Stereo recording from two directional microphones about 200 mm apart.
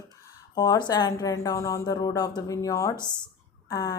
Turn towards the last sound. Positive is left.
turn(degrees=15)  # may be behind; listen again after turning